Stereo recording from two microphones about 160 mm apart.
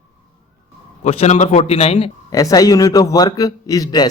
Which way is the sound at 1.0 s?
40° left (ahead or behind).